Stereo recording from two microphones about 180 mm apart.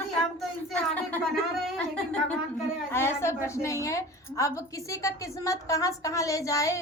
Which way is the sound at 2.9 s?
15° left (ahead or behind).